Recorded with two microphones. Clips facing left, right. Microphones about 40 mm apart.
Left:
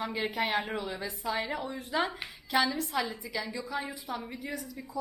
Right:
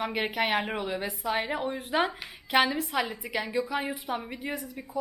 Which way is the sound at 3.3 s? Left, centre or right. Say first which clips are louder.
Right 6 dB; right.